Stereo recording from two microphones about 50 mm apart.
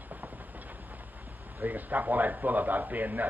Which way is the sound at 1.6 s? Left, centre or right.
Right.